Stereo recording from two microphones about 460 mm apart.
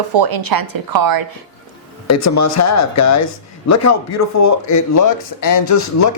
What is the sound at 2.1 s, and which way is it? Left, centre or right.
A man's voice, left.